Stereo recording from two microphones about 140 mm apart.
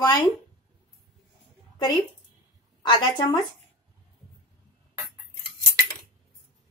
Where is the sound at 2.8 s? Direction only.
35° left (ahead or behind).